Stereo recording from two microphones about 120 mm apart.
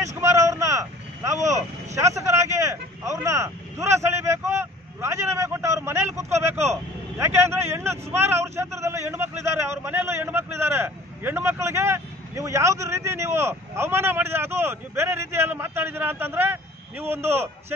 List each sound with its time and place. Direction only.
0.0 s vehicle: 25° right (ahead or behind)
2.0 s speech: 25° right (ahead or behind)
3.2 s vehicle: 25° right (ahead or behind)
7.2 s a man's voice: 20° right (ahead or behind)